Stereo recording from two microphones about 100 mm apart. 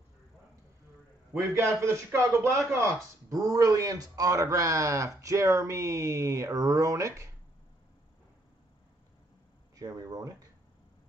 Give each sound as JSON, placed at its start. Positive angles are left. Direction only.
{"t": 1.4, "sound": "speech", "side_deg": -30}
{"t": 9.8, "sound": "speech", "side_deg": -35}